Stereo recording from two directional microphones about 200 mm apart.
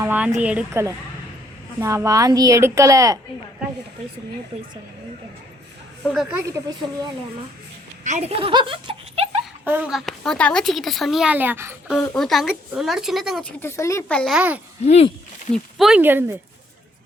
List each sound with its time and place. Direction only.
0.0 s a woman's voice: 5° right (ahead or behind)
6.4 s a woman's voice: 15° right (ahead or behind)
8.0 s speech: 35° right (ahead or behind)
9.6 s speech: 5° right (ahead or behind)
11.9 s speech: centre (ahead or behind)
14.3 s a woman's voice: 5° right (ahead or behind)
14.8 s speech: 30° left (ahead or behind)
15.5 s a woman's voice: centre (ahead or behind)